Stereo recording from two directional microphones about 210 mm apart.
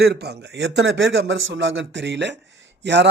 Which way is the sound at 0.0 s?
50° right (ahead or behind).